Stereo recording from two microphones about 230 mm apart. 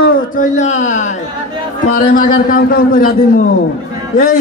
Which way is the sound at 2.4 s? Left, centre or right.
Left.